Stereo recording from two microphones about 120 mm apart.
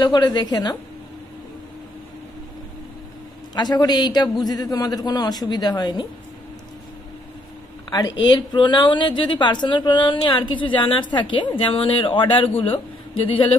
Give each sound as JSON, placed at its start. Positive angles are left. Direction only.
{"t": 0.0, "sound": "a man's voice", "side_deg": 40}
{"t": 3.5, "sound": "a man's voice", "side_deg": 35}
{"t": 7.9, "sound": "a woman's voice", "side_deg": 35}